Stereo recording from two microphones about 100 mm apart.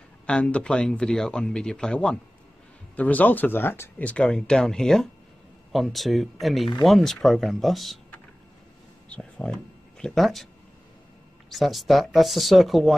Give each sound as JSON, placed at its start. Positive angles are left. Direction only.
{"t": 0.3, "sound": "speech", "side_deg": 10}
{"t": 4.0, "sound": "speech", "side_deg": 10}
{"t": 9.1, "sound": "speech", "side_deg": 5}
{"t": 11.5, "sound": "speech", "side_deg": 0}